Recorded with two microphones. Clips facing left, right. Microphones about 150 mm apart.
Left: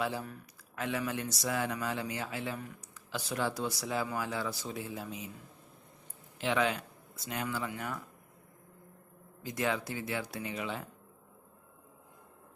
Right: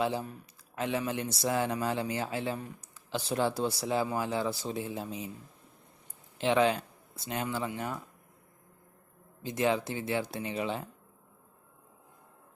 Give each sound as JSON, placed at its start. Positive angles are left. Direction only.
{"t": 0.0, "sound": "speech", "side_deg": -25}
{"t": 6.4, "sound": "speech", "side_deg": -30}
{"t": 9.4, "sound": "speech", "side_deg": -25}